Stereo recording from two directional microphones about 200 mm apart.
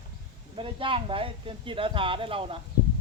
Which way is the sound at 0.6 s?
25° right (ahead or behind).